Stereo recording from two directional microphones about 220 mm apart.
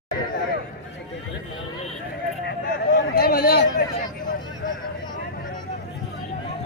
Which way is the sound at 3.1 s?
45° left (ahead or behind).